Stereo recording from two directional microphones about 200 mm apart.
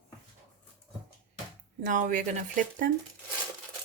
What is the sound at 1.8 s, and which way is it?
Speech, 40° right (ahead or behind).